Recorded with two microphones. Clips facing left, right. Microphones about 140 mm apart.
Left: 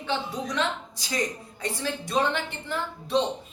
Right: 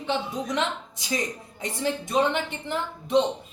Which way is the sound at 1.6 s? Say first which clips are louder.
Right 3 dB; 20° right (ahead or behind).